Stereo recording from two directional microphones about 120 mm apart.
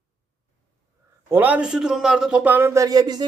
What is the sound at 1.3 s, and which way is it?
A man's voice, 15° right (ahead or behind).